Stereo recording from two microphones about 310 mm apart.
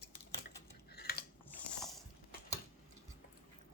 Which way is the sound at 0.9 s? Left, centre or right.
Left.